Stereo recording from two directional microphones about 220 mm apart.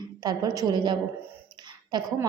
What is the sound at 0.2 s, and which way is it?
A woman's voice, 15° right (ahead or behind).